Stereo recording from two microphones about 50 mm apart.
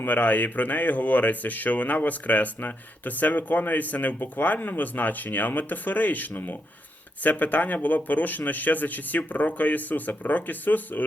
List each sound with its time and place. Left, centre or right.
0.0 s speech: left